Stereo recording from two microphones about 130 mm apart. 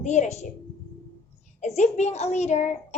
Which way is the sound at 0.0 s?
60° left (ahead or behind).